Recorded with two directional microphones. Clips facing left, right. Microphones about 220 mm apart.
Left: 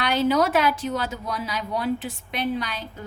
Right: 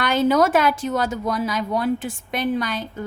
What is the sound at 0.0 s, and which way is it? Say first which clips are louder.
A woman's voice: right 3 dB; 50° right (ahead or behind).